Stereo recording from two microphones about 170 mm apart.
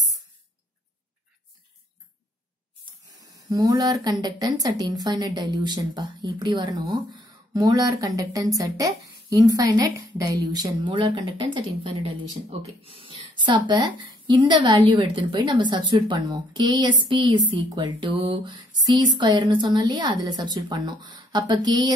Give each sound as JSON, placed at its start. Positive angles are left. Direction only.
{"t": 3.2, "sound": "speech", "side_deg": -20}